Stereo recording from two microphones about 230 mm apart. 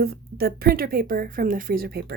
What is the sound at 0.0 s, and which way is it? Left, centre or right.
A woman's voice, right.